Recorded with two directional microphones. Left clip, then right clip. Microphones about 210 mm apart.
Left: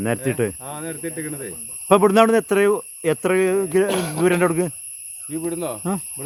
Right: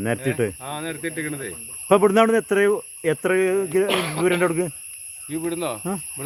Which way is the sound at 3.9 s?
30° left (ahead or behind).